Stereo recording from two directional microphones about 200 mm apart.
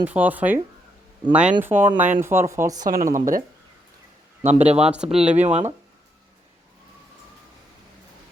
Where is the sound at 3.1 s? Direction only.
40° right (ahead or behind).